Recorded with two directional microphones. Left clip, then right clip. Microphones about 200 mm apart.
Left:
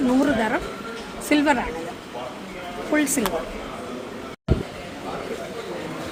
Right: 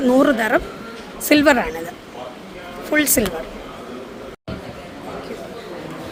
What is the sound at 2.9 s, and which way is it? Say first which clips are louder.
Speech: right 4 dB; 60° right (ahead or behind).